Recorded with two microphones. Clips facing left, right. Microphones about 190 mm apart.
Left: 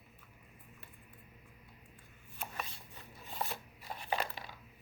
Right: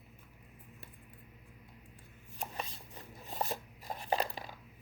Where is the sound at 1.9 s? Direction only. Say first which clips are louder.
Right 2 dB; 30° right (ahead or behind).